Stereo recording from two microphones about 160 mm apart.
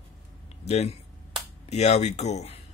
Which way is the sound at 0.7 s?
40° left (ahead or behind).